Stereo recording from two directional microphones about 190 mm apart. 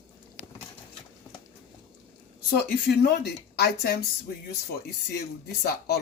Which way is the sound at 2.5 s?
55° left (ahead or behind).